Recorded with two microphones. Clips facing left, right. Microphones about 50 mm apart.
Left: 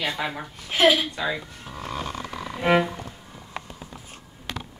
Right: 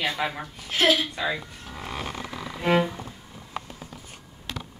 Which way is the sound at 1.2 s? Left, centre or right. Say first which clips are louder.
Left 1 dB; centre.